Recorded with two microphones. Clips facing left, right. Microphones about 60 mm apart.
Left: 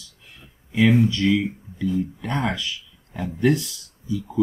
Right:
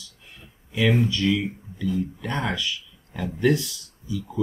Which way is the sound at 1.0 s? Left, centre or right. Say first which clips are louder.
Left 3 dB; left.